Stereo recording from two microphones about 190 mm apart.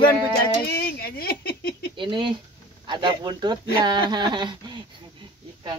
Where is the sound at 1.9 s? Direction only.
25° right (ahead or behind).